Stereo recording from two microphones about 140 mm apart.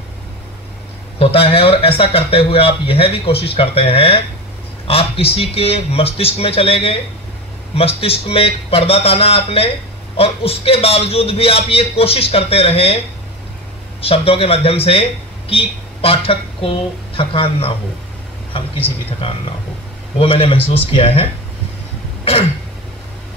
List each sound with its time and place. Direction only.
1.2 s speech: 40° left (ahead or behind)
14.0 s speech: 45° left (ahead or behind)
20.2 s speech: 45° left (ahead or behind)